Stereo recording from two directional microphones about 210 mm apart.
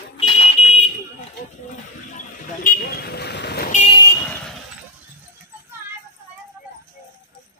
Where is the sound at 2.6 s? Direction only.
45° left (ahead or behind).